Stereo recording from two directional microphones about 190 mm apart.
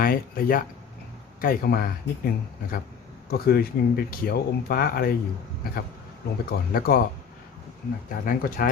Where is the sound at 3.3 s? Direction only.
55° left (ahead or behind).